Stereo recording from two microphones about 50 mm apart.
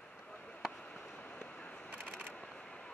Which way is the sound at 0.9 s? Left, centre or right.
Left.